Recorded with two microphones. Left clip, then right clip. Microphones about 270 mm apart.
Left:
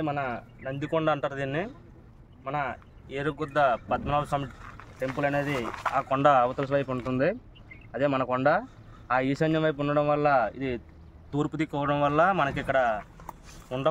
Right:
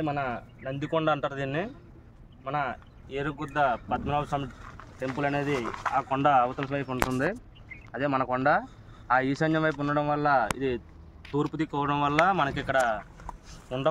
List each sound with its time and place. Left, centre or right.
0.0 s speech: centre
3.1 s speech: left
4.7 s speech: centre
5.7 s speech: centre
5.9 s speech: left; by 13.8 s centre